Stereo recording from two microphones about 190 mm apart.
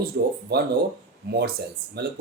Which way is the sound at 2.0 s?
60° right (ahead or behind).